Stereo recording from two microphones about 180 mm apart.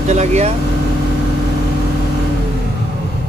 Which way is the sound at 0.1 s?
40° right (ahead or behind).